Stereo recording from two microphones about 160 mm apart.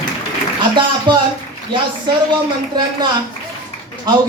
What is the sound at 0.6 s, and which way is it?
Speech, 30° right (ahead or behind).